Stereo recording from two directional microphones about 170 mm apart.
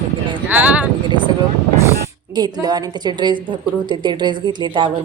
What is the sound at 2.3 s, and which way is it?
A woman's voice, 25° right (ahead or behind).